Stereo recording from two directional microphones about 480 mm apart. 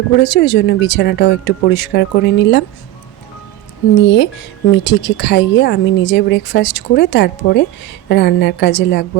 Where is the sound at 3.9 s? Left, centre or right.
Left.